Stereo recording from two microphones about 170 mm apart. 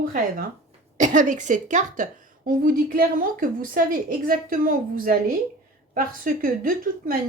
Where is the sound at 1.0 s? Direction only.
45° right (ahead or behind).